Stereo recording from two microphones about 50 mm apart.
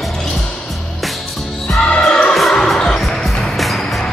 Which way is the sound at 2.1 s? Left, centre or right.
Left.